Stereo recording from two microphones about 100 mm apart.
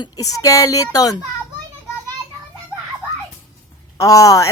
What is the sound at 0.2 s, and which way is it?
Speech, 35° left (ahead or behind).